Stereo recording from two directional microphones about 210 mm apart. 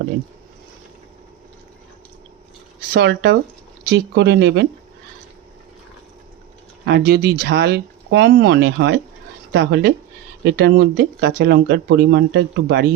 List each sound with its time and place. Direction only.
2.9 s speech: 50° right (ahead or behind)
6.8 s speech: 50° right (ahead or behind)